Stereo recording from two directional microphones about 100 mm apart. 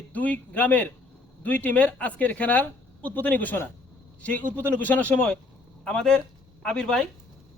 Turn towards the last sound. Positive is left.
turn(degrees=10)  # may be behind; listen again after turning